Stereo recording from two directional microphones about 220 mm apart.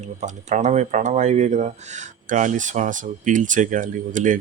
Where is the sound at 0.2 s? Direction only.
30° right (ahead or behind).